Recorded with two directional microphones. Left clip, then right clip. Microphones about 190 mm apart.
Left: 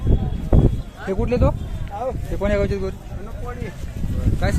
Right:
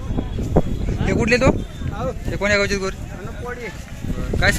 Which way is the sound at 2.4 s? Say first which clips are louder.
Right 4 dB; 10° left (ahead or behind).